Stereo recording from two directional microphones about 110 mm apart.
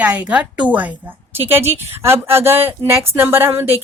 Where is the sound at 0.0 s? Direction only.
10° right (ahead or behind).